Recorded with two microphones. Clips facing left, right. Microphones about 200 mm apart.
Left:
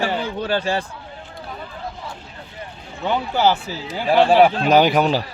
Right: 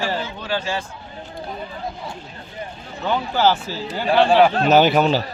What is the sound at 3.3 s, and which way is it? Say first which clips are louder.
Speech: even; 10° left (ahead or behind).